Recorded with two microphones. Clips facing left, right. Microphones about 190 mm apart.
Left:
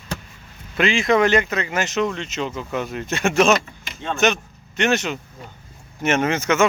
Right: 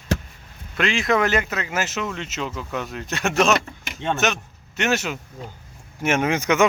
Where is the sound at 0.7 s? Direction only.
Centre (ahead or behind).